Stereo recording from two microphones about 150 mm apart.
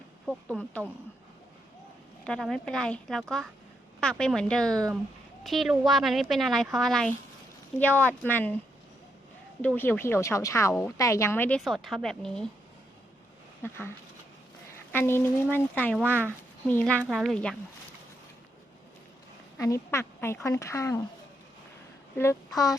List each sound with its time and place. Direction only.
0.3 s speech: 5° left (ahead or behind)
2.2 s a woman's voice: 5° left (ahead or behind)
4.7 s speech: 25° right (ahead or behind)
5.4 s a woman's voice: centre (ahead or behind)
9.6 s speech: 10° left (ahead or behind)
11.6 s a woman's voice: centre (ahead or behind)
13.6 s speech: 15° left (ahead or behind)
14.9 s speech: 15° left (ahead or behind)
16.0 s speech: 10° right (ahead or behind)
16.6 s speech: 10° left (ahead or behind)
17.0 s a woman's voice: centre (ahead or behind)
19.5 s speech: 20° left (ahead or behind)
22.2 s speech: 20° left (ahead or behind)